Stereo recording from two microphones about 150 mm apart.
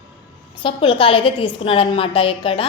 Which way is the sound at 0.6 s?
35° left (ahead or behind).